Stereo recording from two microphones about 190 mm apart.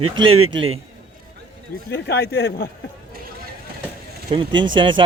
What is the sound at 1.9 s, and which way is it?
Speech, 60° left (ahead or behind).